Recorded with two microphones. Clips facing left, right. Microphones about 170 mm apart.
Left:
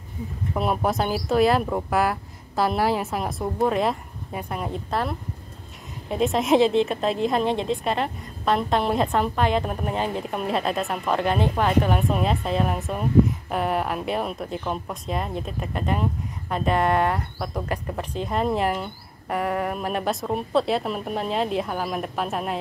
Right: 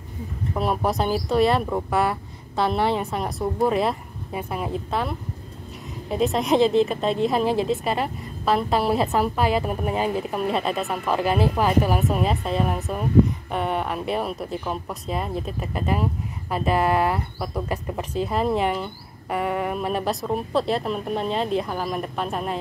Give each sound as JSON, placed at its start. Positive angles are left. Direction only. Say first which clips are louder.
{"t": 0.6, "sound": "speech", "louder": "even", "side_deg": 0}